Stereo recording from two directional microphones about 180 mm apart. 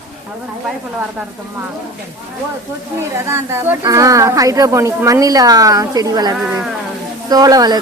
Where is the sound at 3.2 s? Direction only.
15° right (ahead or behind).